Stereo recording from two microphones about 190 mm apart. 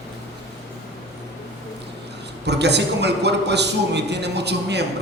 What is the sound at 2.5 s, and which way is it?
A man's voice, 65° right (ahead or behind).